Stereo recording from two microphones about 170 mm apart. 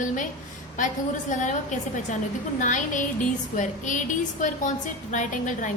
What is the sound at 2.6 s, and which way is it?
A woman's voice, 50° left (ahead or behind).